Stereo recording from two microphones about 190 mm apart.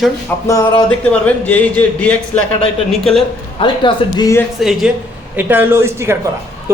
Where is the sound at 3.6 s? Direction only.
25° left (ahead or behind).